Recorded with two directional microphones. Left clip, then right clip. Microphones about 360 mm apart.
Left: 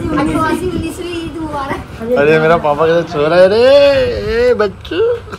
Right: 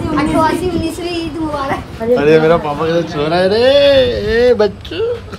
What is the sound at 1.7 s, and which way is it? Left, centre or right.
Speech, centre.